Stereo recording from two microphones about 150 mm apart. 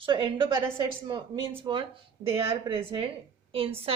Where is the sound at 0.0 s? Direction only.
35° right (ahead or behind).